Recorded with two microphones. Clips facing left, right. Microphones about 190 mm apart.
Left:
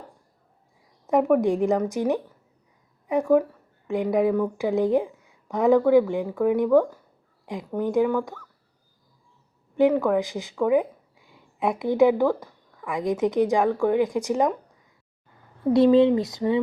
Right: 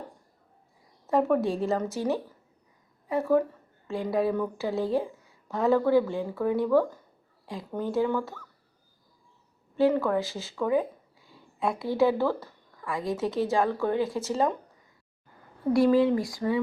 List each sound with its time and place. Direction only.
1.0 s a woman's voice: 15° left (ahead or behind)
9.7 s a woman's voice: 15° left (ahead or behind)
15.7 s speech: 20° left (ahead or behind)